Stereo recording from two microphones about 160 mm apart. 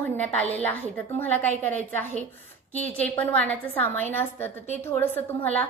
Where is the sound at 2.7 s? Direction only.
10° left (ahead or behind).